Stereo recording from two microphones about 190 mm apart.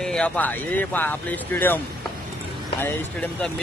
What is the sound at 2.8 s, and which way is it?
Speech, 10° left (ahead or behind).